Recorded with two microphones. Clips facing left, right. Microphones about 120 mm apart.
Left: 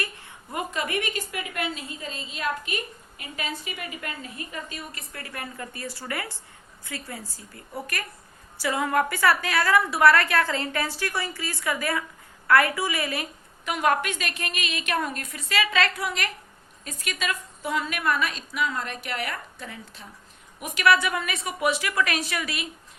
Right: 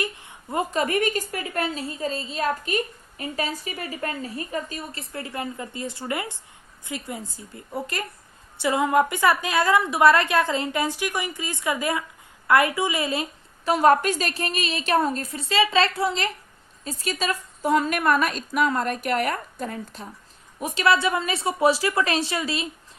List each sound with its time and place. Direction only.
0.0 s a sound: 20° right (ahead or behind)
0.5 s a woman's voice: 40° right (ahead or behind)
13.7 s a woman's voice: 35° right (ahead or behind)
20.6 s a woman's voice: 30° right (ahead or behind)